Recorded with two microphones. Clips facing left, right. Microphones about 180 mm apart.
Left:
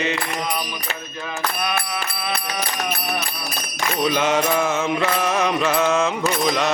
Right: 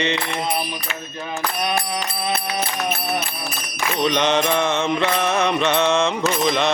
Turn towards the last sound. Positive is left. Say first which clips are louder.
# right 1 dB
turn(degrees=5)  # may be behind; listen again after turning